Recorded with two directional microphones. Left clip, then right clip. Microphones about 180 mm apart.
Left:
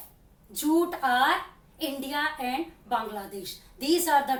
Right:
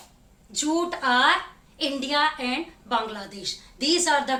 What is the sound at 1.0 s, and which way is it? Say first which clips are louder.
A woman's voice: right 3 dB; 15° right (ahead or behind).